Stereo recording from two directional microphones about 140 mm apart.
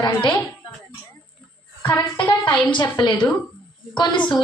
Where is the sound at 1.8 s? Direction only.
25° left (ahead or behind).